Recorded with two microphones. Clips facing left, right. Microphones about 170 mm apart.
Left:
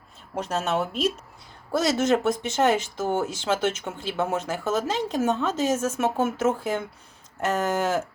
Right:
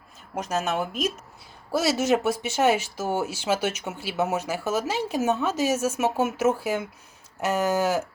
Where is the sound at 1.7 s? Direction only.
5° right (ahead or behind).